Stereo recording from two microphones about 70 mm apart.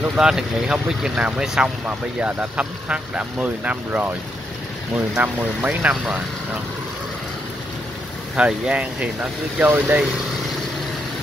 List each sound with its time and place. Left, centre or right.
0.1 s speech: centre
5.1 s speech: right
8.4 s speech: centre